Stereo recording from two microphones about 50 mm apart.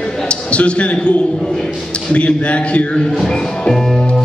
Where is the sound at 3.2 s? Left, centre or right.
Centre.